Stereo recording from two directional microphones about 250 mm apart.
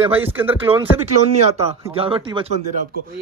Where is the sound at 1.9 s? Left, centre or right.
Right.